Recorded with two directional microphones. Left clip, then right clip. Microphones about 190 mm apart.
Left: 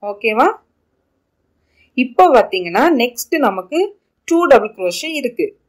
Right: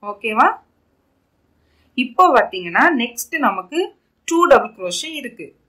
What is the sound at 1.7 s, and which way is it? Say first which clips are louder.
Speech: left 3 dB; 20° left (ahead or behind).